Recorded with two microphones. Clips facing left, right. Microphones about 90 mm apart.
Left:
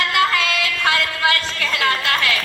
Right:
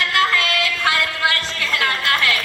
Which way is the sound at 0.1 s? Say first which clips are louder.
Right 1 dB; 20° left (ahead or behind).